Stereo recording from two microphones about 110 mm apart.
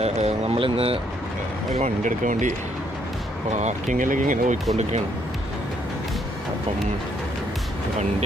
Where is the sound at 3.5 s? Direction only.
90° right.